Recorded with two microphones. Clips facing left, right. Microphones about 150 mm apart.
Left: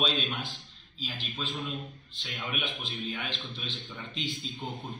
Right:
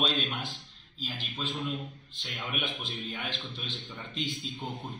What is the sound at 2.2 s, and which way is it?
Speech, centre (ahead or behind).